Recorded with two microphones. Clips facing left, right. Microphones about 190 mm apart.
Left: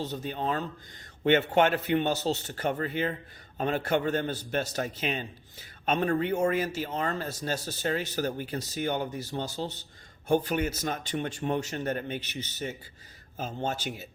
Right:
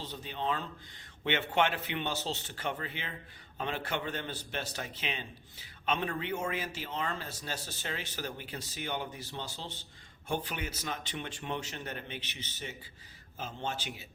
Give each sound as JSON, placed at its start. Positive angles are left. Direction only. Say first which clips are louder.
{"t": 0.0, "sound": "a man's voice", "louder": "left 5 dB", "side_deg": 45}